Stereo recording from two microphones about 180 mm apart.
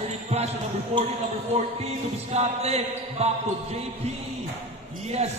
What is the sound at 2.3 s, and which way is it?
Basketball bounce, 35° right (ahead or behind).